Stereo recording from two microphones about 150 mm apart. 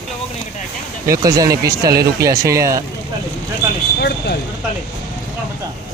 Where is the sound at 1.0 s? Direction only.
20° right (ahead or behind).